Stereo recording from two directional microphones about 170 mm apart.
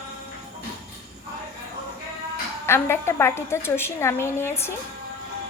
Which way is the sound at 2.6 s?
15° left (ahead or behind).